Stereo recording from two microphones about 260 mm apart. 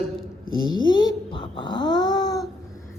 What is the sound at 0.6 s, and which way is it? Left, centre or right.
A woman's voice, centre.